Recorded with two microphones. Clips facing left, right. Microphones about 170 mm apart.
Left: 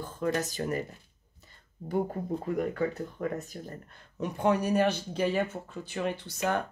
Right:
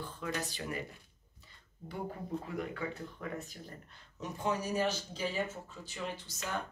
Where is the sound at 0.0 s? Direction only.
45° left (ahead or behind).